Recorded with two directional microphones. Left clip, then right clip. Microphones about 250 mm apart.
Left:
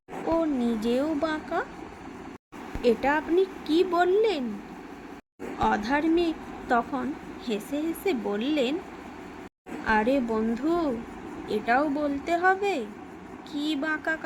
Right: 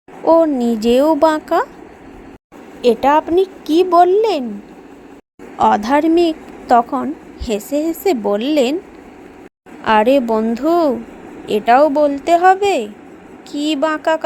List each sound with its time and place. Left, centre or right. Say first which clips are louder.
0.3 s speech: right 14 dB; right
2.8 s speech: right 11 dB; right
5.5 s speech: right 12 dB; right
9.8 s speech: right 12 dB; right